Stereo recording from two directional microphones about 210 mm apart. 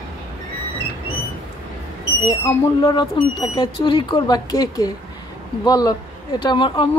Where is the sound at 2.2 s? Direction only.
25° left (ahead or behind).